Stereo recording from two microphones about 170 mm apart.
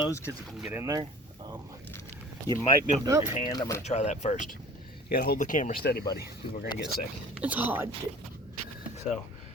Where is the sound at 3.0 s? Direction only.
15° right (ahead or behind).